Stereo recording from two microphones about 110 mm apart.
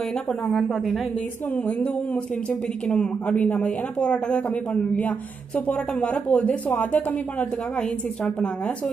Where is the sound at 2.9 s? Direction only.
10° left (ahead or behind).